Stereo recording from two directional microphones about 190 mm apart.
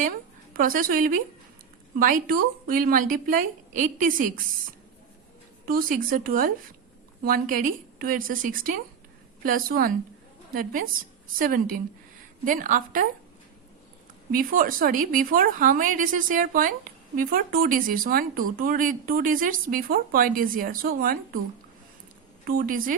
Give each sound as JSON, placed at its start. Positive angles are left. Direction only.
{"t": 0.5, "sound": "speech", "side_deg": -45}
{"t": 5.6, "sound": "speech", "side_deg": -45}
{"t": 14.3, "sound": "speech", "side_deg": -50}
{"t": 22.4, "sound": "speech", "side_deg": -50}